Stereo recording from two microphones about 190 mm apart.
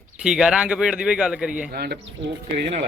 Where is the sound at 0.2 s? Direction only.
5° right (ahead or behind).